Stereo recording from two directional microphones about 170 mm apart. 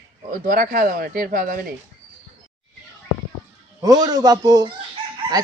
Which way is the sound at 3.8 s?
20° right (ahead or behind).